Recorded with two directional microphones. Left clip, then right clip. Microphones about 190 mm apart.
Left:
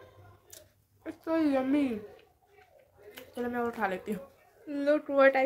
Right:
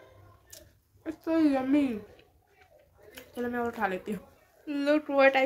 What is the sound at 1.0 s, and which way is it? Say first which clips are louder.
Speech: right 3 dB; centre (ahead or behind).